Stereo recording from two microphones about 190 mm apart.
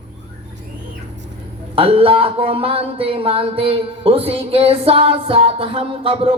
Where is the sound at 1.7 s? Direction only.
30° right (ahead or behind).